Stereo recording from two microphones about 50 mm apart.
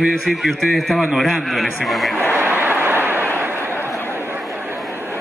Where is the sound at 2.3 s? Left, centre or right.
Right.